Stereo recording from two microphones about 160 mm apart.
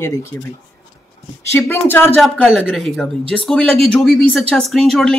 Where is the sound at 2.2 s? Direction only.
Centre (ahead or behind).